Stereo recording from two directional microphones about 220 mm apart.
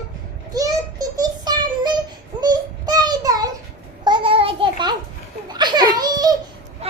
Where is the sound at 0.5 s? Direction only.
15° right (ahead or behind).